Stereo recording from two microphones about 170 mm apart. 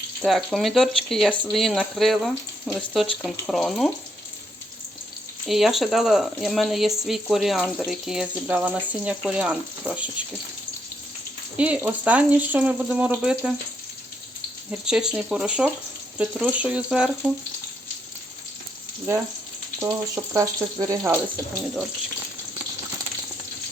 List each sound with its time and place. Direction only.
0.2 s speech: centre (ahead or behind)
5.5 s speech: centre (ahead or behind)
11.5 s speech: 10° right (ahead or behind)
14.7 s speech: 5° right (ahead or behind)
19.8 s speech: 20° right (ahead or behind)